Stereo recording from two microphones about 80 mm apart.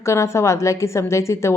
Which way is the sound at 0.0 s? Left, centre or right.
Left.